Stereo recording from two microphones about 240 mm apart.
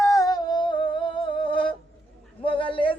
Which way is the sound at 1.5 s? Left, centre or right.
Left.